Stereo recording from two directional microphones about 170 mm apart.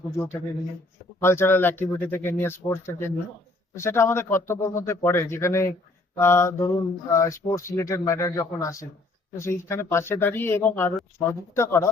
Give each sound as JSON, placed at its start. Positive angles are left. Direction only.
{"t": 0.1, "sound": "speech", "side_deg": 15}